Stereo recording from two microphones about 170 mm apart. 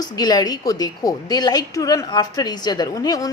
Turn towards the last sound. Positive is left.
turn(degrees=20)  # may be behind; listen again after turning